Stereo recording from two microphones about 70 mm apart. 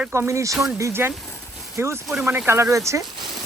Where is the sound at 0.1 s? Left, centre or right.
Right.